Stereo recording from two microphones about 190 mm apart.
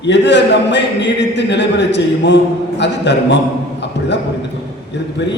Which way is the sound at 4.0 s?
65° left (ahead or behind).